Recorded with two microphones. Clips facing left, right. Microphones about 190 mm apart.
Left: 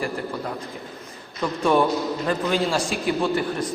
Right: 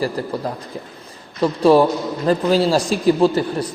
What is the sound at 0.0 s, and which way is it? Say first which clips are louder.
A man's voice: right 5 dB; 35° right (ahead or behind).